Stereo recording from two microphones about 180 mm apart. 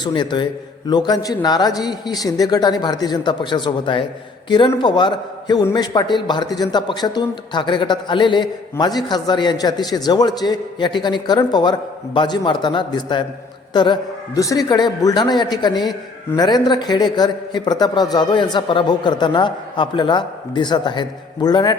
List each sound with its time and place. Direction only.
0.0 s a man's voice: 25° left (ahead or behind)